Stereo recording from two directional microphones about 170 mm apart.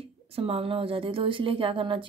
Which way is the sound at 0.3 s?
35° right (ahead or behind).